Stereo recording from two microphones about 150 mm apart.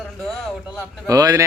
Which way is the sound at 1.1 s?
25° right (ahead or behind).